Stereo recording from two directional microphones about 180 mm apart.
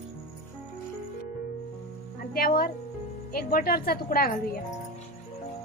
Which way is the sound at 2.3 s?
55° left (ahead or behind).